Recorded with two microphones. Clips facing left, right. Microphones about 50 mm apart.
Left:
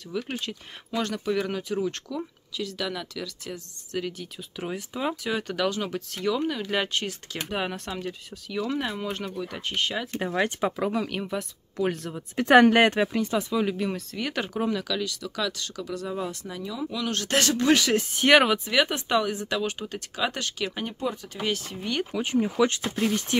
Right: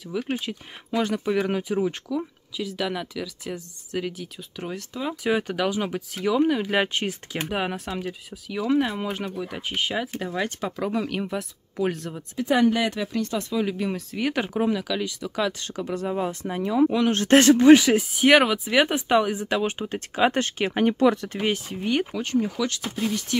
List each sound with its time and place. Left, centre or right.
0.3 s speech: centre
4.2 s speech: centre
5.2 s speech: centre
10.2 s speech: centre
10.9 s speech: centre
12.4 s speech: left
13.1 s speech: centre
17.9 s speech: centre
18.7 s speech: centre; by 20.8 s right
21.0 s speech: right
21.6 s speech: centre
22.2 s speech: centre
22.6 s speech: left